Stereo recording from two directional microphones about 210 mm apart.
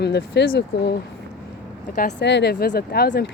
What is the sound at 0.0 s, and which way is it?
Speech, 50° left (ahead or behind).